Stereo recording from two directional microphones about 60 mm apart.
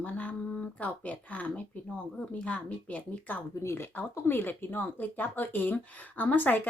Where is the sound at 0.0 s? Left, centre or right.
Left.